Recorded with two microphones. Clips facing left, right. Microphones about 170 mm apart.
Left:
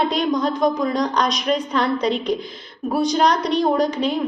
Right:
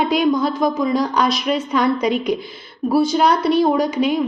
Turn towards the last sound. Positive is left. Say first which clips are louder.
# right 2 dB
turn(degrees=-10)  # may be behind; listen again after turning